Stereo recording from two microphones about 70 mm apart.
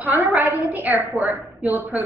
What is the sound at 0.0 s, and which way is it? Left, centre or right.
A woman's voice, right.